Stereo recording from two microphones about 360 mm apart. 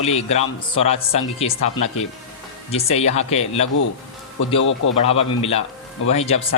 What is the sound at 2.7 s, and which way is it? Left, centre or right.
Speech, centre.